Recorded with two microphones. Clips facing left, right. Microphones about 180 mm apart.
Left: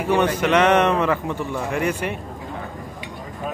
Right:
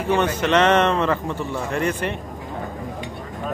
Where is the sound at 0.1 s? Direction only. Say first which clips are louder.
Left 1 dB; 10° left (ahead or behind).